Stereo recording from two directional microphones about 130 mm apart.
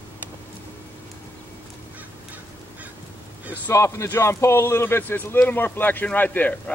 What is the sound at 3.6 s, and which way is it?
Speech, 25° left (ahead or behind).